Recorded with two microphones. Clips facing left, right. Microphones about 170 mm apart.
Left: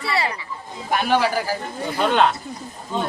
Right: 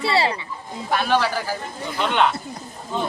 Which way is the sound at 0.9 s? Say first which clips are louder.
Left 1 dB; 15° left (ahead or behind).